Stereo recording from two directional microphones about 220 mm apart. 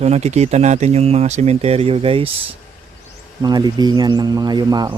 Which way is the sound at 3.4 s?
20° right (ahead or behind).